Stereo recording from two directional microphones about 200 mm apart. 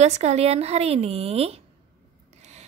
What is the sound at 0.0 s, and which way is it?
A woman's voice, 35° right (ahead or behind).